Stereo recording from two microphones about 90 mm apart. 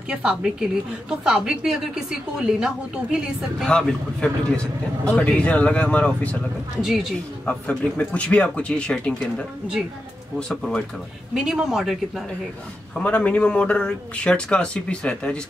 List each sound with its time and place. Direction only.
0.1 s a woman's voice: 10° right (ahead or behind)
3.6 s a man's voice: 10° left (ahead or behind)
6.8 s speech: 5° right (ahead or behind)
7.4 s a man's voice: 15° left (ahead or behind)
10.5 s speech: 5° left (ahead or behind)
12.9 s a man's voice: 15° left (ahead or behind)